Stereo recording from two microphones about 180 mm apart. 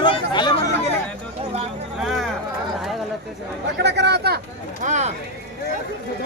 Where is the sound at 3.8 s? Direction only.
70° right (ahead or behind).